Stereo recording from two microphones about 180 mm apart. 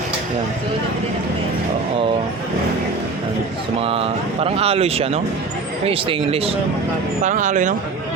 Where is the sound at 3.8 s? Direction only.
30° right (ahead or behind).